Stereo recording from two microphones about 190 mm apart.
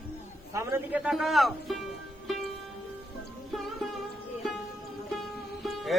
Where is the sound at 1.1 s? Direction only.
Centre (ahead or behind).